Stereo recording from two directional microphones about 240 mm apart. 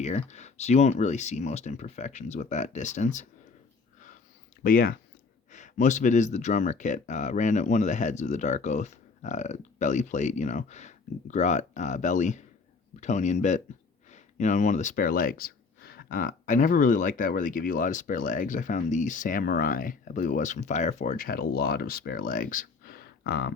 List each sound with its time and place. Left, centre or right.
0.0 s speech: left
4.6 s speech: left